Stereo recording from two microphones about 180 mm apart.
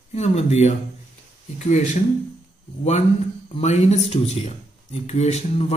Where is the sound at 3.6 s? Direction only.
40° left (ahead or behind).